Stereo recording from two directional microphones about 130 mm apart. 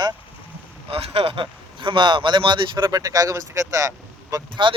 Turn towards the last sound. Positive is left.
turn(degrees=-25)  # may be behind; listen again after turning